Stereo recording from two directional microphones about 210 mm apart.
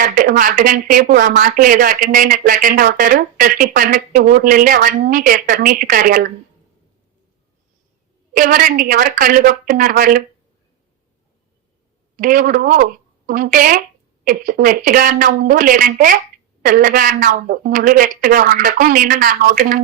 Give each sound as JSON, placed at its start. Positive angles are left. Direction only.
{"t": 0.0, "sound": "speech", "side_deg": -40}
{"t": 8.3, "sound": "speech", "side_deg": -40}
{"t": 12.1, "sound": "speech", "side_deg": -40}